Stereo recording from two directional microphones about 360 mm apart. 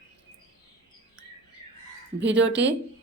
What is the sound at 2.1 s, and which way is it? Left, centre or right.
Speech, right.